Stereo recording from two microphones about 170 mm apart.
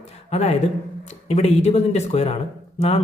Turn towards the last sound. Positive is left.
turn(degrees=40)  # may be behind; listen again after turning